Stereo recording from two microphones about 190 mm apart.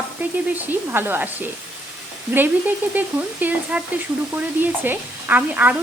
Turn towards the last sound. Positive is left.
turn(degrees=-10)  # may be behind; listen again after turning